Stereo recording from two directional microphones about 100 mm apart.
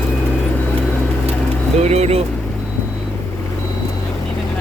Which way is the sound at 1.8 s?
90° right.